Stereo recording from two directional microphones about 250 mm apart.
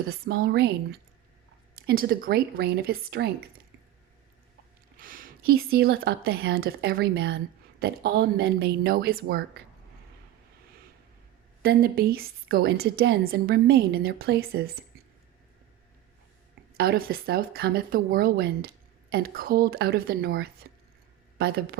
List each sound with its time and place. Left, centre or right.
0.1 s a woman's voice: right
4.9 s a woman's voice: right
11.6 s a woman's voice: right
16.7 s a woman's voice: right